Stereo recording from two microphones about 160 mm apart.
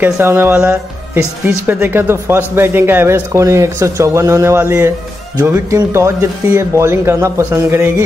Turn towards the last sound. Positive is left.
turn(degrees=-15)  # may be behind; listen again after turning